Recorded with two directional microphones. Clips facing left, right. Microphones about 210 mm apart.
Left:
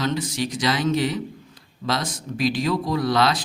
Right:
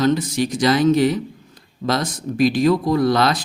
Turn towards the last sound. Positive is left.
turn(degrees=-50)  # may be behind; listen again after turning